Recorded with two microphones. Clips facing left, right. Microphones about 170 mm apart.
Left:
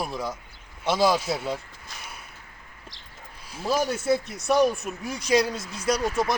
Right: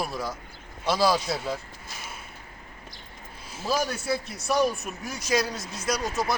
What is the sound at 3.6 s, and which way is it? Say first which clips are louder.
Speech: left 3 dB; 20° left (ahead or behind).